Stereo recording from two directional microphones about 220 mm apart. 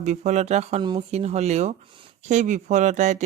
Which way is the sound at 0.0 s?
30° right (ahead or behind).